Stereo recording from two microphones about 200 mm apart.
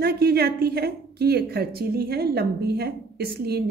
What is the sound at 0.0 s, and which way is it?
A woman's voice, 50° right (ahead or behind).